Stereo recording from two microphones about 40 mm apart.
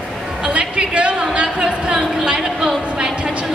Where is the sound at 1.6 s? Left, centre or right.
Centre.